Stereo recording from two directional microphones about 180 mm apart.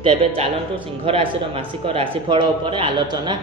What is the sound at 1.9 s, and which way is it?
Speech, 30° right (ahead or behind).